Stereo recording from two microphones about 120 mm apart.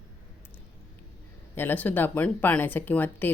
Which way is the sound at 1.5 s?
15° left (ahead or behind).